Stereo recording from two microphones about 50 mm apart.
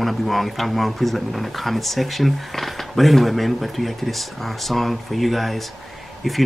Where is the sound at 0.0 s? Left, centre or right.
Centre.